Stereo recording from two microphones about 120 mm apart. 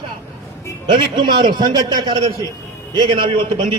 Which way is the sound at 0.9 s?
40° right (ahead or behind).